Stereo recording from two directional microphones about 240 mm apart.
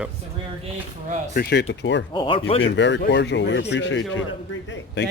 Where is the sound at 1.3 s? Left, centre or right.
Left.